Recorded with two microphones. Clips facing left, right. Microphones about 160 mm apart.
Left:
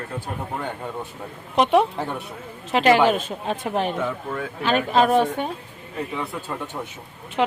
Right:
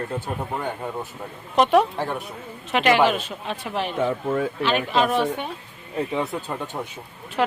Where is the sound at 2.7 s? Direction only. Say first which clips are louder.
Left 2 dB; 35° left (ahead or behind).